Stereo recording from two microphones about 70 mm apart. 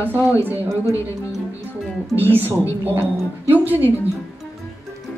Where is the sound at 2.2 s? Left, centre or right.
Right.